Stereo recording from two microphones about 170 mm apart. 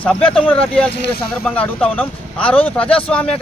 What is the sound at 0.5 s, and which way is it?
Speech, 5° left (ahead or behind).